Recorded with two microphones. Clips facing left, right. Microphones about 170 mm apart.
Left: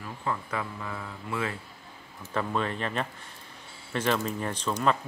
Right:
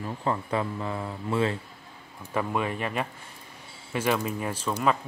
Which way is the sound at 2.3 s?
10° right (ahead or behind).